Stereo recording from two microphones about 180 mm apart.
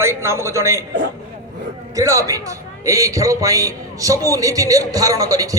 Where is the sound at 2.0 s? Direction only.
20° right (ahead or behind).